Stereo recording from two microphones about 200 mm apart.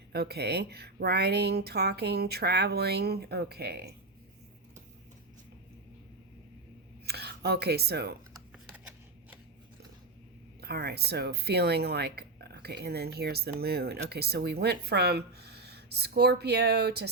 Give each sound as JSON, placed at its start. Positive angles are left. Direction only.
{"t": 0.1, "sound": "speech", "side_deg": -55}
{"t": 7.0, "sound": "a sound", "side_deg": -55}
{"t": 8.5, "sound": "shuffling cards", "side_deg": -10}
{"t": 10.6, "sound": "speech", "side_deg": -50}